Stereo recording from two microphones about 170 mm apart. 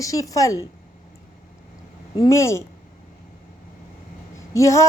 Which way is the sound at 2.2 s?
15° left (ahead or behind).